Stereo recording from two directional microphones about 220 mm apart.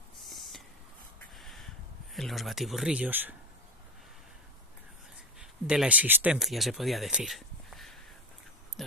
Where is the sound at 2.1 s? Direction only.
Centre (ahead or behind).